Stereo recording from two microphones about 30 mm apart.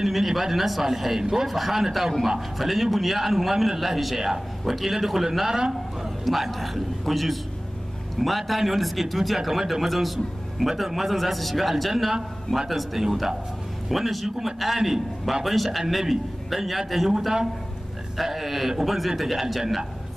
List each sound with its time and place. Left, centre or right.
0.0 s a man's voice: centre